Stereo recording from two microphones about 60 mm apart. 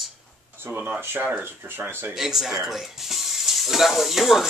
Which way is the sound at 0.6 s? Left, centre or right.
Right.